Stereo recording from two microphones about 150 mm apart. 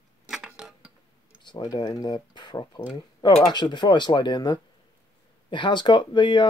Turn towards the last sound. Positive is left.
turn(degrees=30)  # may be behind; listen again after turning